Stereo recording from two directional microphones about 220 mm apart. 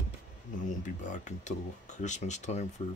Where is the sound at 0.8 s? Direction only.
35° left (ahead or behind).